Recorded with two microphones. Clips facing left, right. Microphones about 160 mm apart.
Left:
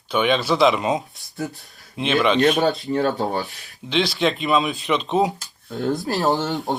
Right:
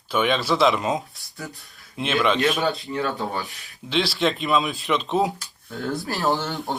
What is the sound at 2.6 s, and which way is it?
Speech, 40° left (ahead or behind).